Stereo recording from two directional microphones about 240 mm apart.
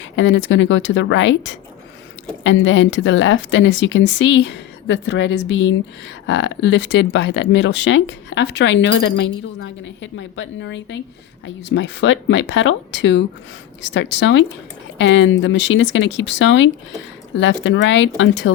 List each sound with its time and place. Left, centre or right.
0.2 s speech: left